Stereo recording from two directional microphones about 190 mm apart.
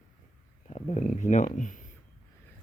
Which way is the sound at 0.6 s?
35° left (ahead or behind).